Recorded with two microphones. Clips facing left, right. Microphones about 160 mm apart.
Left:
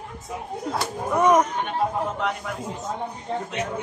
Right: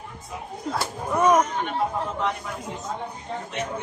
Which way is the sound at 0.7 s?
20° left (ahead or behind).